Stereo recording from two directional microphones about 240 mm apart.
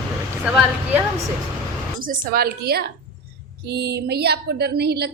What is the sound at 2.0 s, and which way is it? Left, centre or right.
A woman's voice, right.